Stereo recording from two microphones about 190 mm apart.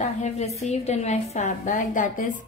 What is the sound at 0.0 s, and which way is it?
A woman's voice, 35° left (ahead or behind).